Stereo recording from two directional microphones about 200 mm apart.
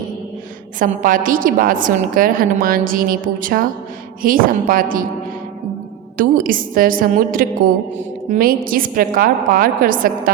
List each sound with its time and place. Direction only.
0.8 s a woman's voice: 40° right (ahead or behind)
6.1 s a woman's voice: 45° right (ahead or behind)